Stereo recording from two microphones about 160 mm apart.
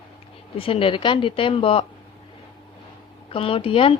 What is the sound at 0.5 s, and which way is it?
A woman's voice, 35° left (ahead or behind).